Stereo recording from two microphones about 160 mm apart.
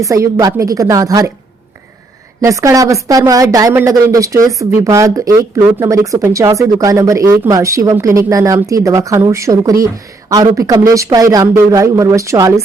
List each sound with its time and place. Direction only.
0.0 s speech: 20° right (ahead or behind)
2.4 s speech: 20° right (ahead or behind)